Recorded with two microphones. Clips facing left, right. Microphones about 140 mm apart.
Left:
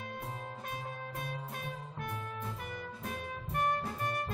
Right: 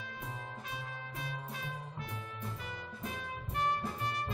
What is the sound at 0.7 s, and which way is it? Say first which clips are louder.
Music: left 3 dB; 50° left (ahead or behind).